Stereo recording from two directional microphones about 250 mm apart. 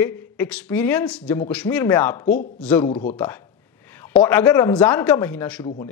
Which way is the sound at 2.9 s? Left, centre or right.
Left.